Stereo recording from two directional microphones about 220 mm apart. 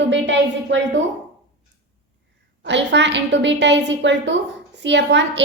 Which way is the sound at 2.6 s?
55° right (ahead or behind).